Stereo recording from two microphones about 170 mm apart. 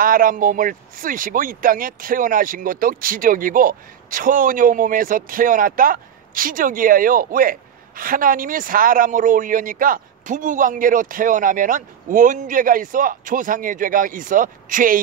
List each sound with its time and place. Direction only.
0.0 s speech: 55° right (ahead or behind)